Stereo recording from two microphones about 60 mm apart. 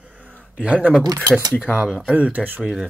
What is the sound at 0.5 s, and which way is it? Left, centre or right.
Speech, centre.